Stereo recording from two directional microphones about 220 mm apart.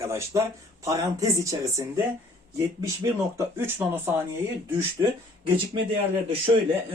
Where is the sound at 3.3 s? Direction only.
10° right (ahead or behind).